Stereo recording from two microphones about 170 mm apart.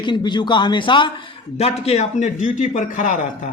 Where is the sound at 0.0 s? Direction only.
25° left (ahead or behind); by 3.2 s 45° left (ahead or behind).